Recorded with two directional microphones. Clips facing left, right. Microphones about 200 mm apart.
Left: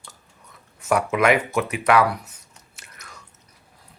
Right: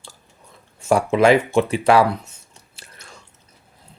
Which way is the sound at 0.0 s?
30° right (ahead or behind).